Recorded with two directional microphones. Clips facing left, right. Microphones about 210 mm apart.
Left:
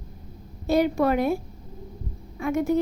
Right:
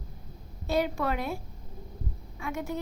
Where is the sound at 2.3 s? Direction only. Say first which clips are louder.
Left 11 dB; 50° left (ahead or behind).